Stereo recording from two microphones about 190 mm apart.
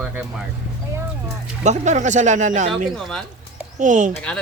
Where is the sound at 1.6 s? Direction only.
40° right (ahead or behind).